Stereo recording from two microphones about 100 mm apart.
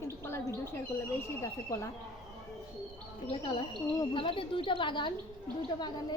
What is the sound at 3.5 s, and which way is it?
A woman's voice, 50° left (ahead or behind).